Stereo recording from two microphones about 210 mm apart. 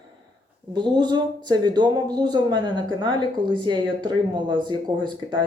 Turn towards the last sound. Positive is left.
turn(degrees=-20)  # may be behind; listen again after turning